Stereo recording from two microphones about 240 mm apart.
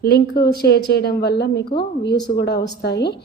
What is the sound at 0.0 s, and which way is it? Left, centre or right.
A woman's voice, left.